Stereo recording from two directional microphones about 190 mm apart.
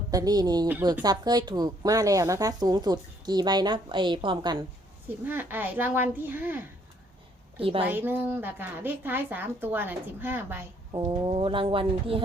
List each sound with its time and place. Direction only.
0.1 s speech: 20° right (ahead or behind)
5.2 s a woman's voice: 10° right (ahead or behind)
7.6 s speech: 30° right (ahead or behind)
7.9 s a woman's voice: 10° right (ahead or behind)
10.9 s speech: 25° right (ahead or behind)